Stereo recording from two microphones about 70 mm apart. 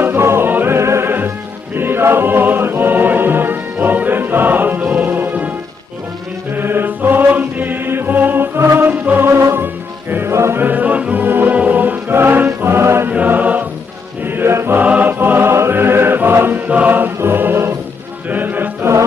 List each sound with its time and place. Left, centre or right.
0.0 s music: right
0.7 s music: right
6.5 s music: right
10.6 s music: right
13.1 s music: right
14.2 s music: right
14.8 s music: right